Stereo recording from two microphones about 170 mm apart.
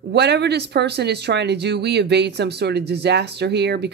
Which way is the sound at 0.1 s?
80° right.